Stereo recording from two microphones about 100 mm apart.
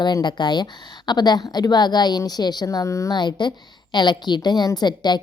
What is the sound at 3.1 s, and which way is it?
A woman's voice, 50° left (ahead or behind).